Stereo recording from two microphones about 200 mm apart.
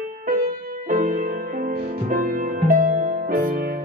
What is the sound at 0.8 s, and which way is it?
Music, 45° right (ahead or behind).